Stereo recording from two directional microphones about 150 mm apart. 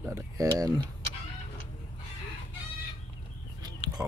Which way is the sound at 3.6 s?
25° right (ahead or behind).